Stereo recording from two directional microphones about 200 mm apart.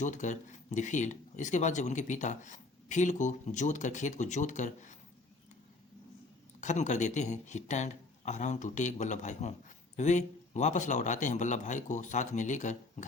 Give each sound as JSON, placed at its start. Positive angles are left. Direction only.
{"t": 0.0, "sound": "a man's voice", "side_deg": 40}
{"t": 6.6, "sound": "a man's voice", "side_deg": 35}